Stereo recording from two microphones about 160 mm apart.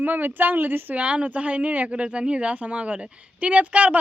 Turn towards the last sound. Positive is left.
turn(degrees=-10)  # may be behind; listen again after turning